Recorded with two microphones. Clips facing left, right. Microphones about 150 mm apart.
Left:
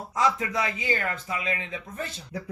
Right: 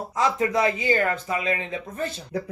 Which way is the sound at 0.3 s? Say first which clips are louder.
Right 7 dB; 45° right (ahead or behind).